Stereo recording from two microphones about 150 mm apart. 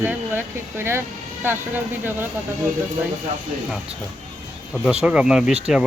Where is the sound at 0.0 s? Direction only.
15° right (ahead or behind).